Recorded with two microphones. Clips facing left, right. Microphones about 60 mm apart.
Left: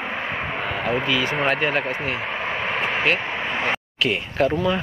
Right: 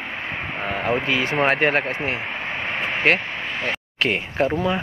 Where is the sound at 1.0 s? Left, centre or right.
Right.